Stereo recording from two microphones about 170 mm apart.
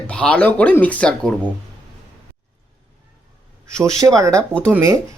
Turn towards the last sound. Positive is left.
turn(degrees=-15)  # may be behind; listen again after turning